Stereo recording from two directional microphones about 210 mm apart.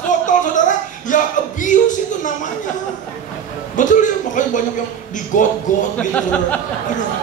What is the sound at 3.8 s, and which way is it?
Speech, 35° left (ahead or behind).